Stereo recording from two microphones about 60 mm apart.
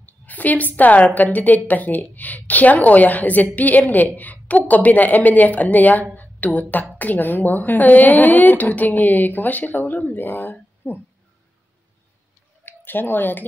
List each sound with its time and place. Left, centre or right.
0.0 s a woman's voice: left
6.1 s a sound: left
6.7 s a woman's voice: left
12.6 s speech: left